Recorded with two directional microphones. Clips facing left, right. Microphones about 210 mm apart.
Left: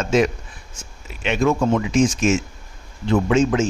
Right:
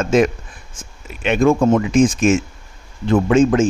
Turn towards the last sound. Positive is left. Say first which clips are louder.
# right 4 dB
turn(degrees=-55)  # may be behind; listen again after turning